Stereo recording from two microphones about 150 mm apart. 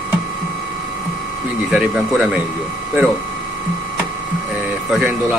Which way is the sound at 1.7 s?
5° right (ahead or behind).